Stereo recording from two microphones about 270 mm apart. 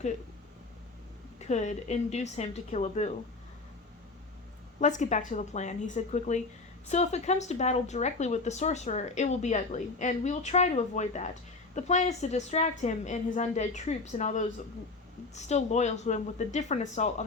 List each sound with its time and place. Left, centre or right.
1.4 s speech: left
4.8 s speech: left